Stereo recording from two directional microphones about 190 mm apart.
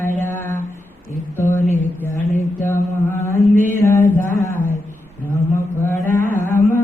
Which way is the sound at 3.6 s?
15° left (ahead or behind).